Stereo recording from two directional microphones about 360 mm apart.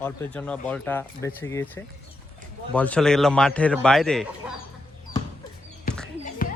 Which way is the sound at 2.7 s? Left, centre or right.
Centre.